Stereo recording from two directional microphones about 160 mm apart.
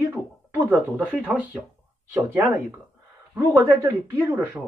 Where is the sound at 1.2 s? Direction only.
10° right (ahead or behind).